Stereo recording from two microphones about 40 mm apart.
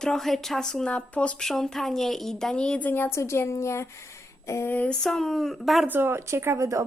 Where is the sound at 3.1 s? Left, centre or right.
Left.